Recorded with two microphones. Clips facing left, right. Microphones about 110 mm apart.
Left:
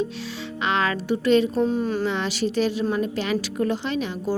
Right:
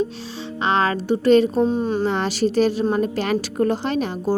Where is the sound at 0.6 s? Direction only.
35° right (ahead or behind).